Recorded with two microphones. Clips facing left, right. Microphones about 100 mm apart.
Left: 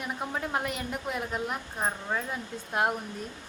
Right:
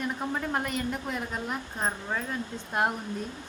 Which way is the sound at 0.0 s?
5° left (ahead or behind).